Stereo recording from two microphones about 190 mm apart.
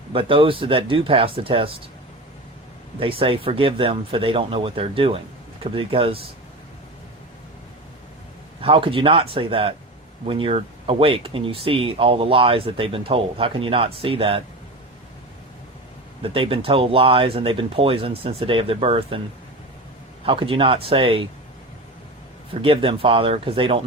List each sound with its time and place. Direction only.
0.1 s speech: 30° right (ahead or behind)
3.0 s speech: 30° right (ahead or behind)
8.6 s speech: 30° right (ahead or behind)
16.2 s speech: 30° right (ahead or behind)
20.2 s speech: 25° right (ahead or behind)
22.6 s speech: 25° right (ahead or behind)